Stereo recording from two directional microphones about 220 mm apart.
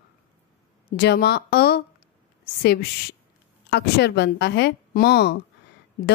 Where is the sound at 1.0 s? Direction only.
45° left (ahead or behind).